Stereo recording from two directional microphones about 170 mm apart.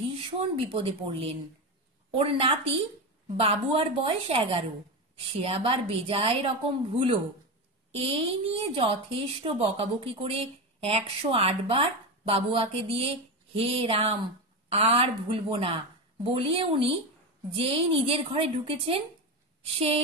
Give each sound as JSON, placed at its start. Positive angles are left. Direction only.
{"t": 0.0, "sound": "a woman's voice", "side_deg": -30}